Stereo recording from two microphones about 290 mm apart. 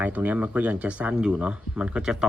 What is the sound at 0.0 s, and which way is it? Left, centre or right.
Speech, centre.